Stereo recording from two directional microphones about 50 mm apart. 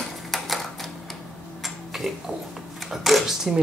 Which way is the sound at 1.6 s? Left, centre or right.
Centre.